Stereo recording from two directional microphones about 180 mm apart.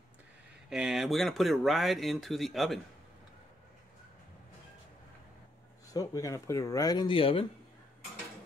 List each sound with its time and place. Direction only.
0.7 s speech: 5° right (ahead or behind)
5.9 s speech: 20° left (ahead or behind)